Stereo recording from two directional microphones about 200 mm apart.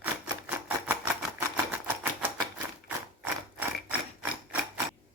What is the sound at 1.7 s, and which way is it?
Typewriter, 10° right (ahead or behind).